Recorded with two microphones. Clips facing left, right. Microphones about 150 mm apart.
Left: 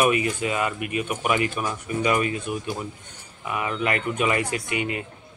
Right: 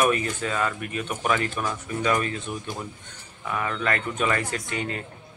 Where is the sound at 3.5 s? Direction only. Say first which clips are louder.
Left 1 dB; 10° left (ahead or behind).